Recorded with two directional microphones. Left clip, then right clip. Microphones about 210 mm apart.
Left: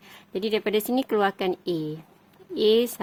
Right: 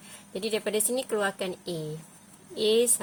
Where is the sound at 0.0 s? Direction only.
45° left (ahead or behind).